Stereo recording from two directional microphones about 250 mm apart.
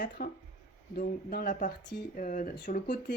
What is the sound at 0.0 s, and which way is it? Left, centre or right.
Speech, left.